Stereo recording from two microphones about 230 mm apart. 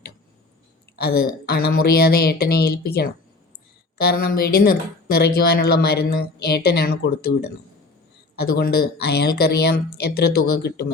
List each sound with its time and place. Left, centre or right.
0.9 s speech: left